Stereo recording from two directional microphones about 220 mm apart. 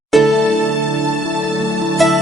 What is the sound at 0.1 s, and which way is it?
Music, centre (ahead or behind).